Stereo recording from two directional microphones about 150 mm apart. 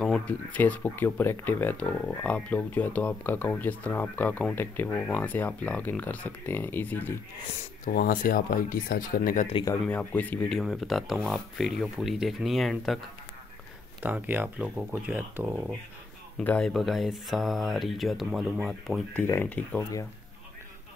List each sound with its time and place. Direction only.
0.0 s speech: 5° left (ahead or behind)
7.8 s speech: 80° left
9.7 s speech: 10° left (ahead or behind)
14.0 s speech: 10° right (ahead or behind)
16.3 s speech: 5° left (ahead or behind)
19.2 s speech: 15° left (ahead or behind)